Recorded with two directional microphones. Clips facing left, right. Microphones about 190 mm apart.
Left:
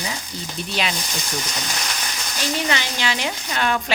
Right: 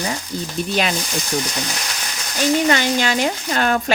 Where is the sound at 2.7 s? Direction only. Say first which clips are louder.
Right 7 dB; 45° right (ahead or behind).